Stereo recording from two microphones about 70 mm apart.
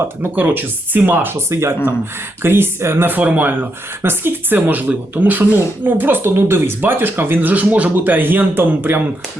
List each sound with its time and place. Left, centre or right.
0.2 s speech: right
3.2 s speech: right